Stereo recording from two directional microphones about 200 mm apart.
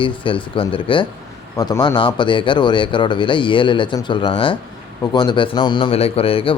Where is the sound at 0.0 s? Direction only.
25° left (ahead or behind).